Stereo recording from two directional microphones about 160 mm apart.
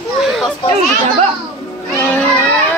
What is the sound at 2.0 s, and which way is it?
Children playing, 10° left (ahead or behind).